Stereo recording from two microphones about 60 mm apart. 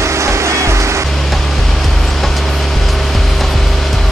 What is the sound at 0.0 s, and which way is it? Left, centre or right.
Music, right.